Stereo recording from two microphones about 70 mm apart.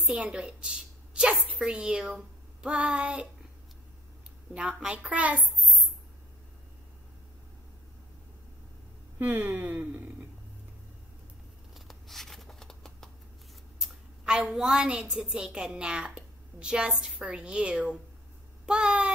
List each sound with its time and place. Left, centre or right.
0.2 s a woman's voice: centre
4.7 s a child's voice: centre
9.2 s speech: right
11.7 s a sound: centre
13.7 s a woman's voice: centre